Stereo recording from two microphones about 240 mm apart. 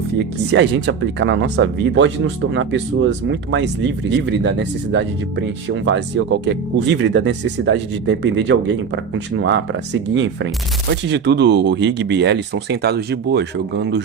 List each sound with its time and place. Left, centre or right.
0.5 s speech: right